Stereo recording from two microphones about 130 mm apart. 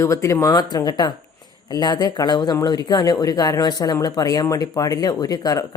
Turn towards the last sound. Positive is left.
turn(degrees=30)  # may be behind; listen again after turning